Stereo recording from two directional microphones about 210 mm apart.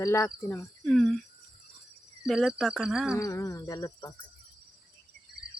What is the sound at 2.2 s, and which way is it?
Cricket, centre (ahead or behind).